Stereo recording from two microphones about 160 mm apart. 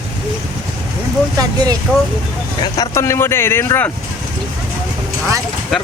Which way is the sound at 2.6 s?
20° left (ahead or behind).